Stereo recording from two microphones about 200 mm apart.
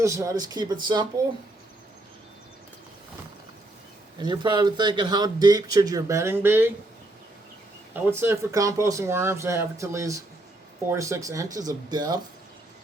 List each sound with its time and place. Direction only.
0.0 s speech: 15° right (ahead or behind)
4.2 s speech: 20° right (ahead or behind)
8.1 s speech: 10° right (ahead or behind)